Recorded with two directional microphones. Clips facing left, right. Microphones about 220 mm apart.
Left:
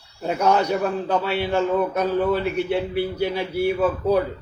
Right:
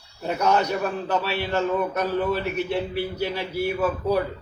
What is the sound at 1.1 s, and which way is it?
A man's voice, 15° left (ahead or behind).